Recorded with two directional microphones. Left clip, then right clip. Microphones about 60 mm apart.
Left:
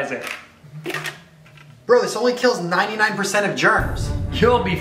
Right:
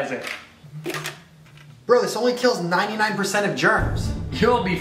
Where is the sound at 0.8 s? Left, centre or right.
Centre.